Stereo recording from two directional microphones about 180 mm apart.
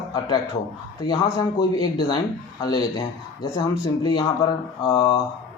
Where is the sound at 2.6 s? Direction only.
20° left (ahead or behind).